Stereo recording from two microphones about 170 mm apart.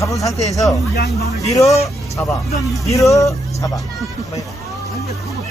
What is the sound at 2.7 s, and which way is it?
Speech, 20° left (ahead or behind).